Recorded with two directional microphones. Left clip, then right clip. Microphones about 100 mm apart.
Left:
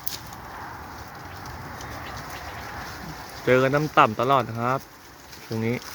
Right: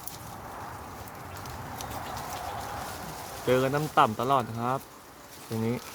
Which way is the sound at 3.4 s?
40° left (ahead or behind).